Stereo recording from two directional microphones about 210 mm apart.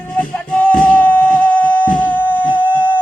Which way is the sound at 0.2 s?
5° left (ahead or behind).